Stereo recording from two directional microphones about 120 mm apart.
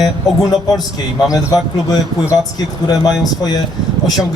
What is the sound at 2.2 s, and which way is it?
Speech, 25° left (ahead or behind).